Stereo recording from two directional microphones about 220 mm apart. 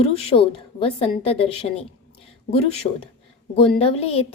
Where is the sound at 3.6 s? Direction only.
25° left (ahead or behind).